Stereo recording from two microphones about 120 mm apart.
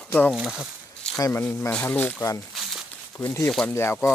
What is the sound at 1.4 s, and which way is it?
Speech, 15° left (ahead or behind).